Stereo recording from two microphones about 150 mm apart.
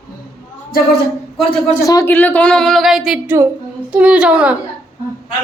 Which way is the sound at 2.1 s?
10° left (ahead or behind).